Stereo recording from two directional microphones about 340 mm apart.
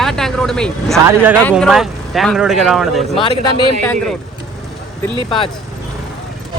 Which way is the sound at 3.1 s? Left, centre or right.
Centre.